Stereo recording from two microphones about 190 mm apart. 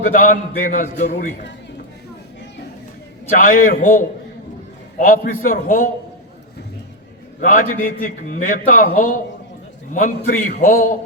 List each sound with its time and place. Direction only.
0.0 s a man's voice: 45° left (ahead or behind)
3.3 s a man's voice: 45° left (ahead or behind)
7.4 s a man's voice: 45° left (ahead or behind)